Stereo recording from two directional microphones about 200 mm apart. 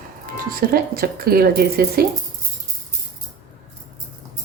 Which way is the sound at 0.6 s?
50° right (ahead or behind).